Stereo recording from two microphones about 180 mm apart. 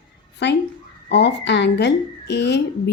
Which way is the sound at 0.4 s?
75° left (ahead or behind).